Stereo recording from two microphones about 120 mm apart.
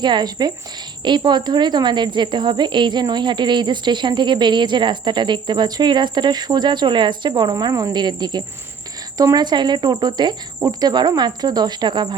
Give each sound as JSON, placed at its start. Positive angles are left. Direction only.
{"t": 0.0, "sound": "speech", "side_deg": -35}